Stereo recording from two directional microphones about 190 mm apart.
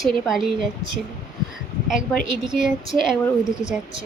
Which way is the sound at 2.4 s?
5° right (ahead or behind).